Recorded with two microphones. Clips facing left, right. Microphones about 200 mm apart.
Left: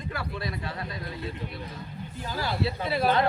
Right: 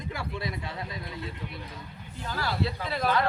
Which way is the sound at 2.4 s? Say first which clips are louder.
Left 2 dB; 25° left (ahead or behind).